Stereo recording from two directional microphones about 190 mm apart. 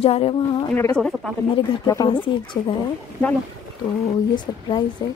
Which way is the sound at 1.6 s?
20° left (ahead or behind).